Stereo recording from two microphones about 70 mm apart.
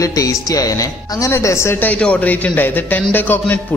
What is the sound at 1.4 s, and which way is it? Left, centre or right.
Speech, left.